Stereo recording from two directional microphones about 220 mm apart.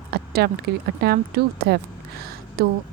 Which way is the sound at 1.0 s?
45° right (ahead or behind).